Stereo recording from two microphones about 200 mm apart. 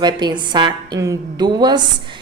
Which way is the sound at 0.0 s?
20° right (ahead or behind).